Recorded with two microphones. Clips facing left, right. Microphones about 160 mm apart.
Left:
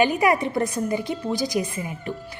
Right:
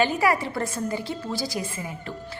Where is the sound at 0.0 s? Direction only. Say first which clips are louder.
Left 3 dB; 15° left (ahead or behind).